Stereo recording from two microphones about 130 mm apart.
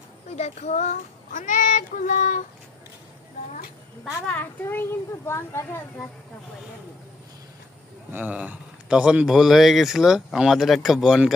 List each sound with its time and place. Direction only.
0.4 s child singing: 60° left (ahead or behind)
4.3 s a child's voice: 15° left (ahead or behind)
8.1 s speech: 10° right (ahead or behind)